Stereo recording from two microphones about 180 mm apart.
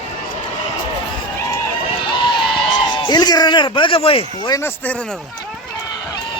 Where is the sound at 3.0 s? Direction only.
25° left (ahead or behind).